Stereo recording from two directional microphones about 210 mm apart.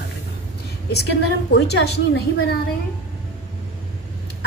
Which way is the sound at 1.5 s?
55° left (ahead or behind).